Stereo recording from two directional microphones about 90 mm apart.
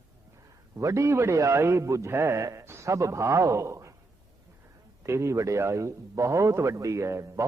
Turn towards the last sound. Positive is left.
turn(degrees=-35)  # may be behind; listen again after turning